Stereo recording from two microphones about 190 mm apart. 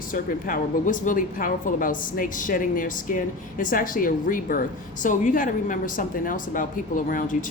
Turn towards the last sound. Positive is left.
turn(degrees=45)  # may be behind; listen again after turning